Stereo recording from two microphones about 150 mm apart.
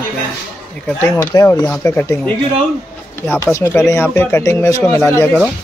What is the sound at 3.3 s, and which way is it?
Speech, 20° left (ahead or behind).